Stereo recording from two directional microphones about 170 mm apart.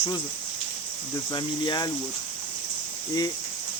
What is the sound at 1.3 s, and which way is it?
Speech, 25° left (ahead or behind).